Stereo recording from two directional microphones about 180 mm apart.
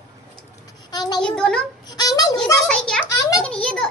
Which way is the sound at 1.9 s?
20° left (ahead or behind).